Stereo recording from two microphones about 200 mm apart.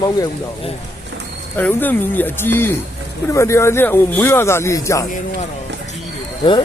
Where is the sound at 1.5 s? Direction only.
10° left (ahead or behind).